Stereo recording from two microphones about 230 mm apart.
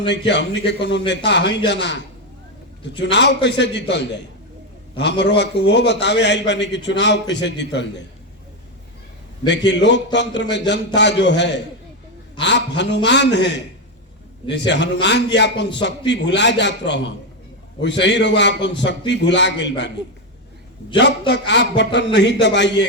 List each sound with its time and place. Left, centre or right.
0.1 s a man's voice: left
5.2 s a man's voice: left
9.5 s a man's voice: left
21.0 s a man's voice: left